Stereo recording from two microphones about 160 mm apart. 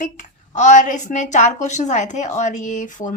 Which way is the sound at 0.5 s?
50° left (ahead or behind).